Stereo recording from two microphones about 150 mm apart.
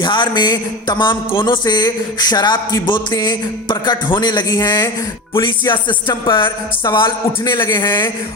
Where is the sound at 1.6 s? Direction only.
30° left (ahead or behind).